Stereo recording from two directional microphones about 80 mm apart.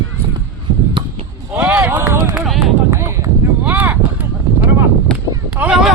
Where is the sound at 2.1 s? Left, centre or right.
Right.